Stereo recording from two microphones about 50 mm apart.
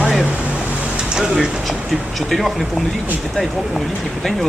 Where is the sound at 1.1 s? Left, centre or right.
Centre.